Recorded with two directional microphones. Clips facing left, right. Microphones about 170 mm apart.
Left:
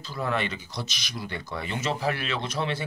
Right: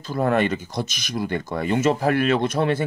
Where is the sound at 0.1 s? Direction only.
50° right (ahead or behind).